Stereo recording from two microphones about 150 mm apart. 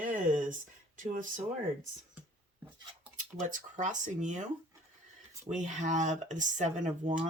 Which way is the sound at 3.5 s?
55° right (ahead or behind).